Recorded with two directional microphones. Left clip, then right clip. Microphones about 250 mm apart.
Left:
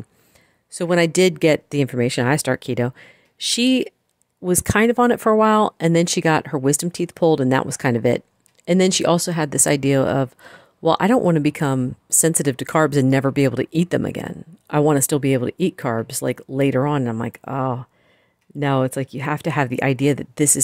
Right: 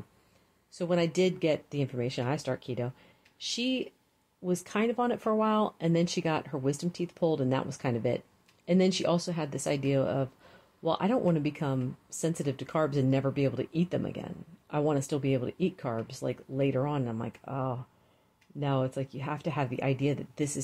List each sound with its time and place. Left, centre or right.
0.7 s speech: left